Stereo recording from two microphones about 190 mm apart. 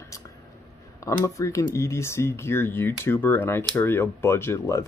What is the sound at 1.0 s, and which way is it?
Speech, 15° left (ahead or behind).